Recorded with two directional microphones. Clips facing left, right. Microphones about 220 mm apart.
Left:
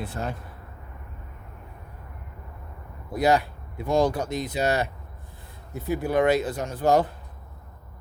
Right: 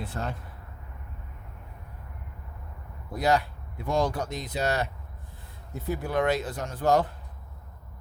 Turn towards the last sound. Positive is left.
turn(degrees=10)  # may be behind; listen again after turning